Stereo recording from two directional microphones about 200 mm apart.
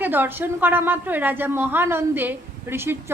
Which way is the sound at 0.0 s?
10° right (ahead or behind).